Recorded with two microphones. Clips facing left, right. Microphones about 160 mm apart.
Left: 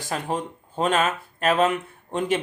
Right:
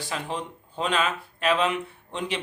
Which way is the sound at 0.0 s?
45° left (ahead or behind).